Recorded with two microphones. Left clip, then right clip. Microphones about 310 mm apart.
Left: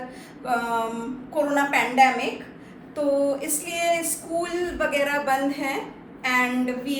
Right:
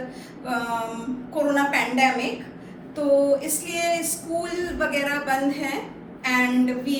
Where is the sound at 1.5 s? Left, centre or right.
Left.